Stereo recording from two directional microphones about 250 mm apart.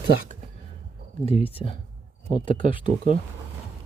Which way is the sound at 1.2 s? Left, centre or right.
Left.